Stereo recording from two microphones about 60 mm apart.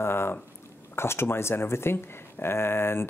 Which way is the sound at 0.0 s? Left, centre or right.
Left.